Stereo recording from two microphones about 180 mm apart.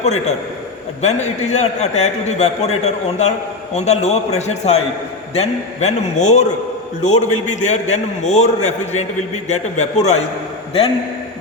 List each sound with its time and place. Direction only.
0.0 s a man's voice: 40° left (ahead or behind)